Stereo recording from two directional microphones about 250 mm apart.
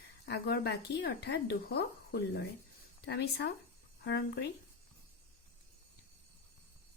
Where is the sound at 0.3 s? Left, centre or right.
Left.